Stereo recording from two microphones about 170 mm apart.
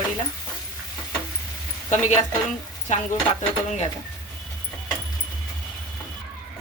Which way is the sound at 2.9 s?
45° left (ahead or behind).